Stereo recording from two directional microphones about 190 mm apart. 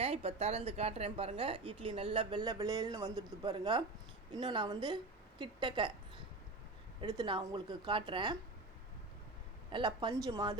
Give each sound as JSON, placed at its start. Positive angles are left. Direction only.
{"t": 0.0, "sound": "a woman's voice", "side_deg": -30}
{"t": 9.7, "sound": "a woman's voice", "side_deg": -25}